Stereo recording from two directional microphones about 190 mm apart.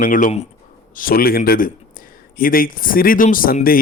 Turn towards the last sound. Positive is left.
turn(degrees=50)  # may be behind; listen again after turning